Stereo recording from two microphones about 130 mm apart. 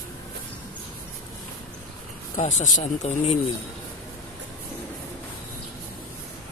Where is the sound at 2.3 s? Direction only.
70° left (ahead or behind).